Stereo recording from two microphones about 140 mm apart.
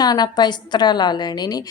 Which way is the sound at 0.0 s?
30° left (ahead or behind).